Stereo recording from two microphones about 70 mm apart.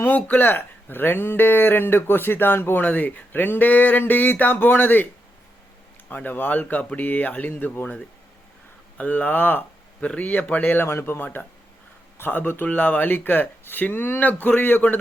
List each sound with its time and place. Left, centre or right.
0.0 s speech: left
6.1 s speech: left
9.0 s speech: left